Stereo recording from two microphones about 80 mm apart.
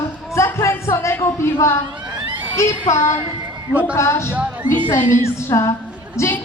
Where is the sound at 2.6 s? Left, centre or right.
Left.